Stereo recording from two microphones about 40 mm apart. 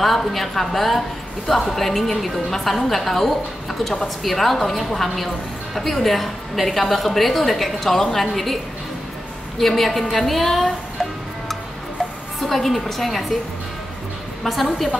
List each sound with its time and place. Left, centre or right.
0.0 s a woman's voice: centre
9.6 s a woman's voice: centre
14.4 s a woman's voice: centre